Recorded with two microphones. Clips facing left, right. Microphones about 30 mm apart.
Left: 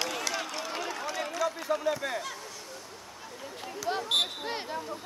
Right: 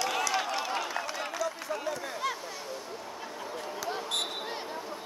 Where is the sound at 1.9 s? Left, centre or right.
Left.